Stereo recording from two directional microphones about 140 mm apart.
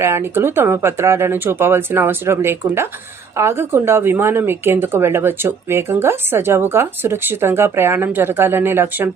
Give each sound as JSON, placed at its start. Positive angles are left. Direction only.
{"t": 0.0, "sound": "a woman's voice", "side_deg": -20}